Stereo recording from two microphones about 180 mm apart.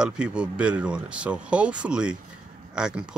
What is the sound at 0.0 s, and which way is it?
Speech, 5° right (ahead or behind).